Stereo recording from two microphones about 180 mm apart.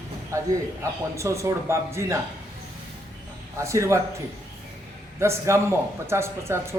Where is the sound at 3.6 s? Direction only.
15° right (ahead or behind).